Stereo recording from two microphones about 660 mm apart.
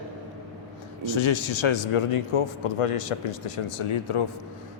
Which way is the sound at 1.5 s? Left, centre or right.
Left.